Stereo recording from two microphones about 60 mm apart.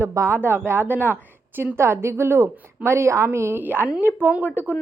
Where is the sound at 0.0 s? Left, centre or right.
Right.